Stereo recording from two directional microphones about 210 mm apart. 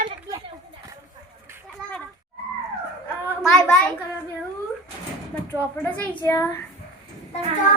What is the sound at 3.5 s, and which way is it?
Speech, 5° left (ahead or behind).